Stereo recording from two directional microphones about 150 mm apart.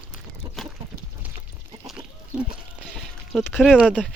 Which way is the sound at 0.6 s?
Centre (ahead or behind).